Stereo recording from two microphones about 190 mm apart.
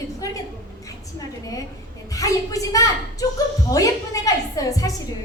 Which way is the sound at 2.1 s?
20° left (ahead or behind).